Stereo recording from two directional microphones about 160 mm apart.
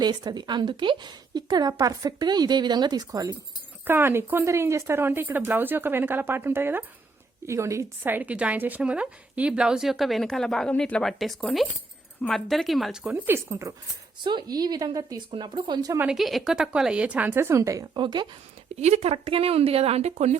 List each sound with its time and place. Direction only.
0.0 s a woman's voice: 25° right (ahead or behind)
16.0 s speech: 5° right (ahead or behind); by 18.3 s 30° right (ahead or behind)
18.8 s speech: 40° right (ahead or behind)